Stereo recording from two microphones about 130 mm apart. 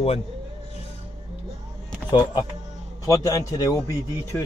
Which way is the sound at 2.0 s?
35° left (ahead or behind).